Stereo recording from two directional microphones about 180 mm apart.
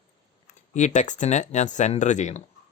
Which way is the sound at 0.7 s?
40° left (ahead or behind).